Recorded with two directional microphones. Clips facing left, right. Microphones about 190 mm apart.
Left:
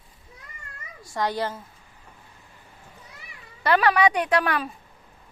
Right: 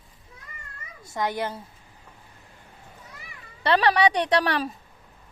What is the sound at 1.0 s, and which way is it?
Speech, 20° right (ahead or behind).